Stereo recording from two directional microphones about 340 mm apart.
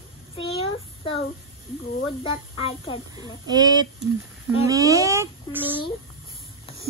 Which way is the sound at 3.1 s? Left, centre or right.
Centre.